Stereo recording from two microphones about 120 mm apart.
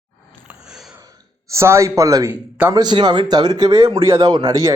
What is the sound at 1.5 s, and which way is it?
Speech, 25° right (ahead or behind).